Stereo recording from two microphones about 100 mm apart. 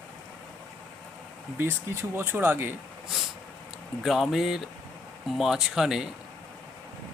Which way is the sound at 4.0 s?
5° right (ahead or behind).